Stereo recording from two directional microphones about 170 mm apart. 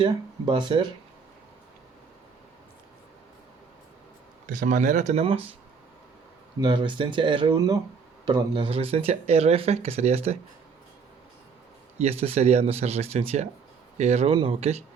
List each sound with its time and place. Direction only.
0.0 s speech: 25° right (ahead or behind)
4.4 s speech: 50° right (ahead or behind)
6.6 s speech: 30° right (ahead or behind)
12.2 s speech: 40° right (ahead or behind)